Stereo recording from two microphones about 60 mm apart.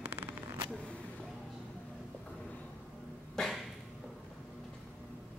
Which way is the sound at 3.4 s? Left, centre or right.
Centre.